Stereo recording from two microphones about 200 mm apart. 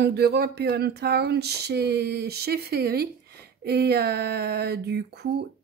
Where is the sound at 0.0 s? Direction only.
55° right (ahead or behind).